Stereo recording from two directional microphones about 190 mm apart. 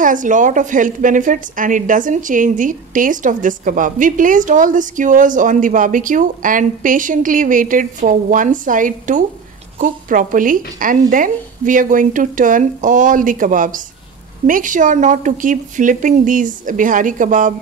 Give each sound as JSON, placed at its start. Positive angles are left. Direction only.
{"t": 0.0, "sound": "a woman's voice", "side_deg": -45}